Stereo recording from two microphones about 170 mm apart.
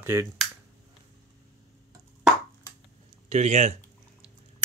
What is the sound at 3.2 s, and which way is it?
Speech, 40° right (ahead or behind).